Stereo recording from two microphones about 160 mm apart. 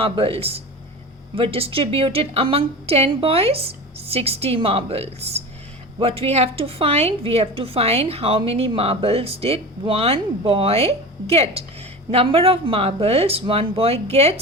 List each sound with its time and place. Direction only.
0.0 s a woman's voice: 35° right (ahead or behind)